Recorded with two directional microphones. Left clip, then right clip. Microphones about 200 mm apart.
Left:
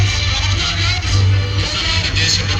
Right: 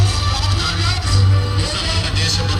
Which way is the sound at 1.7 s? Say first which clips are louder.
Left 5 dB; 45° right (ahead or behind).